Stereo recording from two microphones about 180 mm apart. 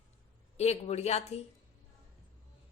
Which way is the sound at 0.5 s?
35° left (ahead or behind).